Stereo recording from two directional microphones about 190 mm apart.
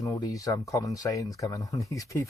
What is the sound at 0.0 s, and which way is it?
Speech, 15° left (ahead or behind).